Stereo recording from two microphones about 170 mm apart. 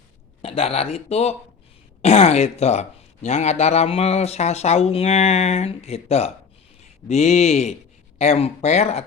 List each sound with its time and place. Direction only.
0.4 s speech: 35° left (ahead or behind)